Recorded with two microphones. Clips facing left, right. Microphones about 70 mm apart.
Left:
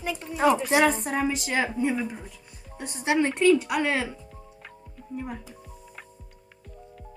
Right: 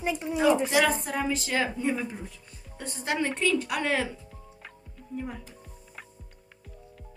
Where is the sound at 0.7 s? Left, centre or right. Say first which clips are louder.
Left 3 dB; left.